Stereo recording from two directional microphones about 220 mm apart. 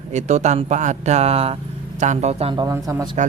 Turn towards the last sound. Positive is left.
turn(degrees=-15)  # may be behind; listen again after turning